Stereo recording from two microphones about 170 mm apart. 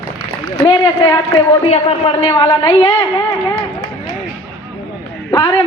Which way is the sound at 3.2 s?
5° left (ahead or behind).